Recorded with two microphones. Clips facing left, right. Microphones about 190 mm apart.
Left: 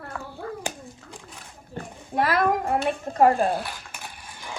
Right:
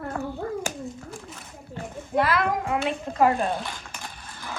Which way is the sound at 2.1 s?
50° left (ahead or behind).